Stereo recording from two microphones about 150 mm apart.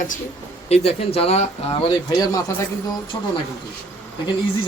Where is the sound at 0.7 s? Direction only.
45° left (ahead or behind).